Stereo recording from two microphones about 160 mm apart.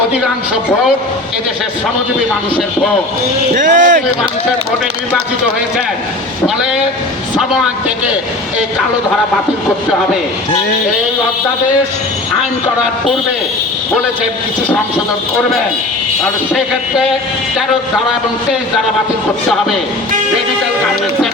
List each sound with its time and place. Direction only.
3.5 s speech: 55° right (ahead or behind)
7.3 s speech: 5° right (ahead or behind)
16.2 s speech: centre (ahead or behind)